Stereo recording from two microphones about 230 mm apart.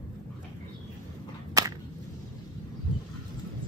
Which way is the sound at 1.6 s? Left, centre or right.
Centre.